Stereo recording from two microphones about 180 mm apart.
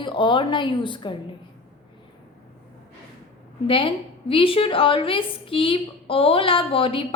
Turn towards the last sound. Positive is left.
turn(degrees=30)  # may be behind; listen again after turning